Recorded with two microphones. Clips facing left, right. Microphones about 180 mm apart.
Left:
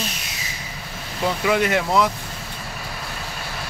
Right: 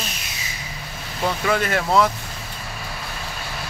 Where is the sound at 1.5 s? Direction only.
15° left (ahead or behind).